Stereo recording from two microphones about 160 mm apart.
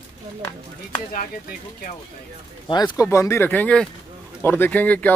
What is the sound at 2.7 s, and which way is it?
Speech, 25° left (ahead or behind).